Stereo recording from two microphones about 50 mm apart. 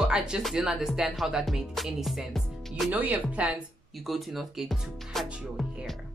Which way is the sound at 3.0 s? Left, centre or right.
Right.